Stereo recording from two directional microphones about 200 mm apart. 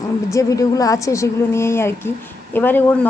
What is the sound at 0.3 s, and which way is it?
Speech, 15° left (ahead or behind).